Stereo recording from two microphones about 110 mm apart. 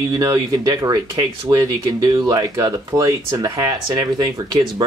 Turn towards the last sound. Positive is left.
turn(degrees=-40)  # may be behind; listen again after turning